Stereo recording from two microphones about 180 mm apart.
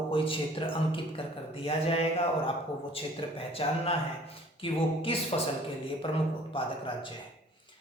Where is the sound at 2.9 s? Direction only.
30° left (ahead or behind).